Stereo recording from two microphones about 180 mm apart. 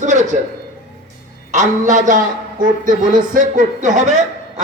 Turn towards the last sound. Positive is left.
turn(degrees=-45)  # may be behind; listen again after turning